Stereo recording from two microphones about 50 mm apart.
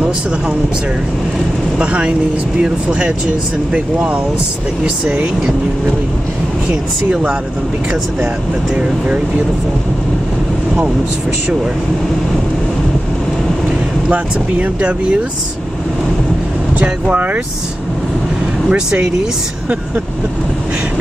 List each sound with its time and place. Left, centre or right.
1.8 s speech: right
14.1 s speech: right
16.8 s speech: right
18.7 s speech: right